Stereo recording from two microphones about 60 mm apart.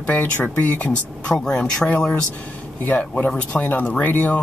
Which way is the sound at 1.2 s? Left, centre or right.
Centre.